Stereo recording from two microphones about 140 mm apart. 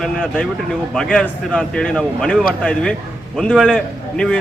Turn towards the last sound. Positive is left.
turn(degrees=5)  # may be behind; listen again after turning